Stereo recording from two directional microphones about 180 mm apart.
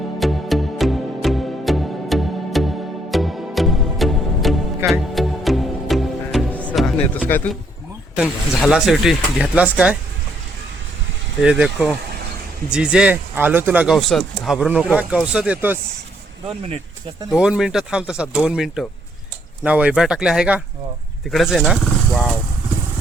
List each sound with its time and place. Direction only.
0.2 s music: centre (ahead or behind)
7.3 s speech: 10° left (ahead or behind)
8.1 s speech: centre (ahead or behind)
11.3 s speech: 5° right (ahead or behind)
16.5 s speech: 30° right (ahead or behind)
17.3 s speech: 5° right (ahead or behind)